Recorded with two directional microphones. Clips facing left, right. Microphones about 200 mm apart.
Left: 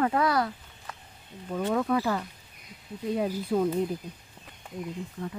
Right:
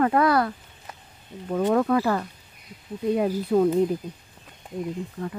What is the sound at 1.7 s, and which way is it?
Speech, 60° right (ahead or behind).